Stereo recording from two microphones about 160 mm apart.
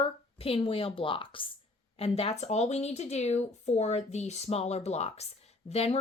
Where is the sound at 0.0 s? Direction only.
35° left (ahead or behind).